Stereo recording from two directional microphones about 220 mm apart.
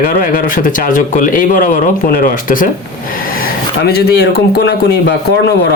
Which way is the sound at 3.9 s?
45° left (ahead or behind).